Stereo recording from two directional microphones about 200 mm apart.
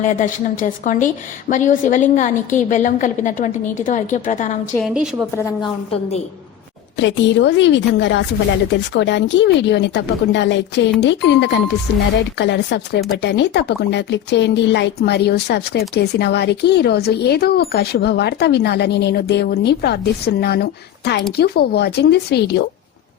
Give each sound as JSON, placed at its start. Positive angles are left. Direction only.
{"t": 0.0, "sound": "a woman's voice", "side_deg": 40}
{"t": 4.8, "sound": "a woman's voice", "side_deg": -5}
{"t": 5.9, "sound": "a woman's voice", "side_deg": 30}
{"t": 6.9, "sound": "speech", "side_deg": 65}